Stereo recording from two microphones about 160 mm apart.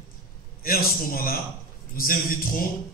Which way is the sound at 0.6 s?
65° left (ahead or behind).